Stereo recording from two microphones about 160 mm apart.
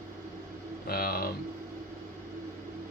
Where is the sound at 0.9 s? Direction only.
70° left (ahead or behind).